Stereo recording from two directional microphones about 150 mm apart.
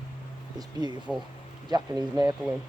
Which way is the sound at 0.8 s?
30° right (ahead or behind).